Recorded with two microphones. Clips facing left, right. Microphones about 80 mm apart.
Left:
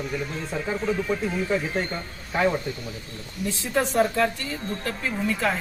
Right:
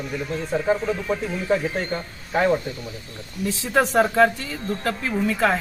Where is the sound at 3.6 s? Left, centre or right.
Right.